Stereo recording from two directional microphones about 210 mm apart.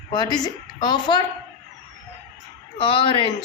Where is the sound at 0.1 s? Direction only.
20° left (ahead or behind).